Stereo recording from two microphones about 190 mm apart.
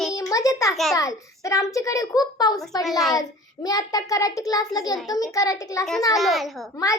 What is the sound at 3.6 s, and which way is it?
A child's voice, 20° left (ahead or behind).